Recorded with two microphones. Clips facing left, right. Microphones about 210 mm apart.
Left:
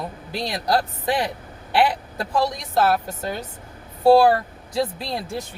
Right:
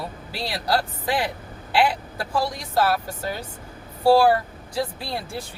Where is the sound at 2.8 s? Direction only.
20° left (ahead or behind).